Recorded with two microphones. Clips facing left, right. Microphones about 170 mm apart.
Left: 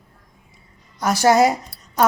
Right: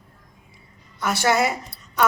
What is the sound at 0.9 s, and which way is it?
Speech, 40° left (ahead or behind).